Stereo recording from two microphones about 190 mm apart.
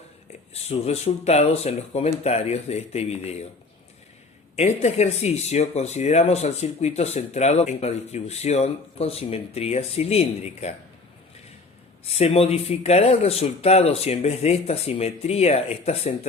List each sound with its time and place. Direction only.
0.5 s speech: 35° left (ahead or behind)
4.5 s speech: 35° left (ahead or behind)
12.0 s speech: 30° left (ahead or behind)